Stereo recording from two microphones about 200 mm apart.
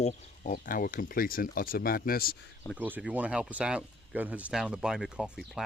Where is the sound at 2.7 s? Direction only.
10° right (ahead or behind).